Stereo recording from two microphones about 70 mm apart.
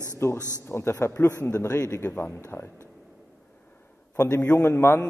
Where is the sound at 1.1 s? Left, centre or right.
Left.